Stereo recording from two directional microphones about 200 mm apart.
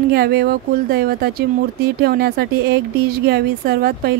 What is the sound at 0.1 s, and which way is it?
Speech, 50° right (ahead or behind).